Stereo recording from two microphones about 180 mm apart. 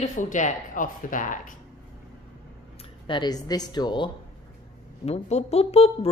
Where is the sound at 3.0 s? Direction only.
25° left (ahead or behind).